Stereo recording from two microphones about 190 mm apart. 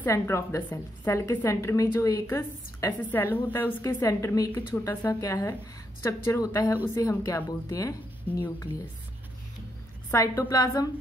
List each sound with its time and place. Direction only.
0.0 s a woman's voice: 15° left (ahead or behind)
10.1 s a woman's voice: 15° left (ahead or behind)